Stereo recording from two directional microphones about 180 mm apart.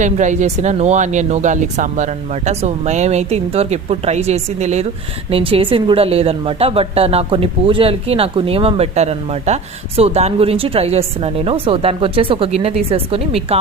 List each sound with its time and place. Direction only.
0.0 s a woman's voice: 45° right (ahead or behind)